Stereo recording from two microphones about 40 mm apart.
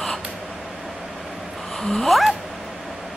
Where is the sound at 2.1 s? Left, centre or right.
Centre.